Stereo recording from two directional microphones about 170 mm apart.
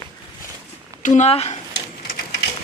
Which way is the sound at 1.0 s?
45° left (ahead or behind).